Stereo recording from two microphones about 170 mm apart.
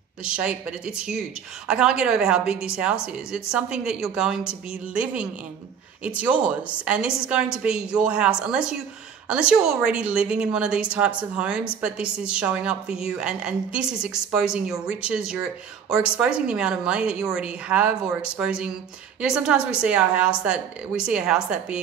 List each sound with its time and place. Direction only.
0.2 s a woman's voice: 5° right (ahead or behind)